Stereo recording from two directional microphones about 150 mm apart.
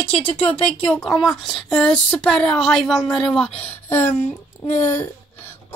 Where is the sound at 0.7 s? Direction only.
10° left (ahead or behind).